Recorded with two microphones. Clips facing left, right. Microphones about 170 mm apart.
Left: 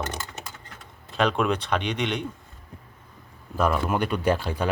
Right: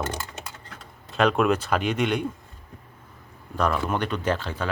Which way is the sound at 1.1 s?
Centre (ahead or behind).